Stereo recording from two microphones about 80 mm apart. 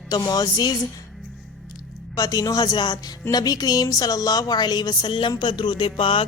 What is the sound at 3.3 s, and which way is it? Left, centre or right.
A woman's voice, left.